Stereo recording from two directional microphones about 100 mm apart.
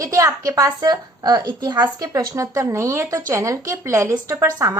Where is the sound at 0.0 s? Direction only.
30° right (ahead or behind).